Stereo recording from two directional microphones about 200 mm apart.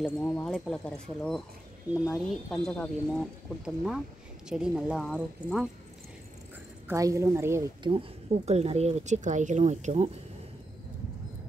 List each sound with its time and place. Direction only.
0.2 s speech: 10° left (ahead or behind)
6.9 s a woman's voice: 15° right (ahead or behind)
7.9 s speech: 30° right (ahead or behind)